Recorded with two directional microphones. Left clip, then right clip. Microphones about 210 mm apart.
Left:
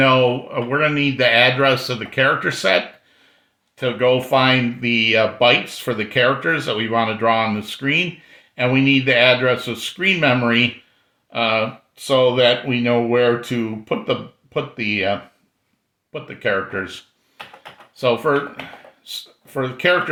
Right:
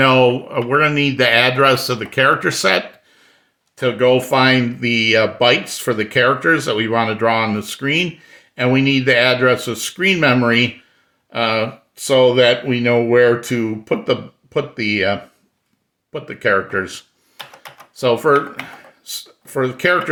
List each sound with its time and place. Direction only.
0.0 s speech: 40° right (ahead or behind)
16.1 s speech: 40° right (ahead or behind)
19.5 s speech: 35° right (ahead or behind)